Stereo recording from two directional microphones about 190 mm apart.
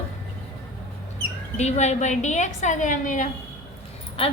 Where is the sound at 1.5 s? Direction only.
35° left (ahead or behind).